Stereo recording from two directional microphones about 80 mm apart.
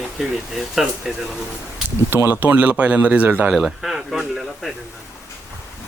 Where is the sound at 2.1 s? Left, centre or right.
Right.